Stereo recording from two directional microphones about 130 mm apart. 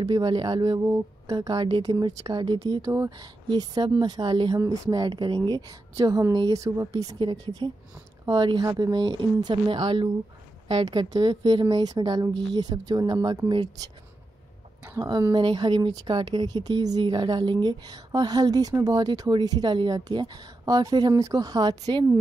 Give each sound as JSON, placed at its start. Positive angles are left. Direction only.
{"t": 0.0, "sound": "speech", "side_deg": -30}
{"t": 0.8, "sound": "a sound", "side_deg": -20}
{"t": 1.3, "sound": "speech", "side_deg": -30}
{"t": 14.9, "sound": "speech", "side_deg": -30}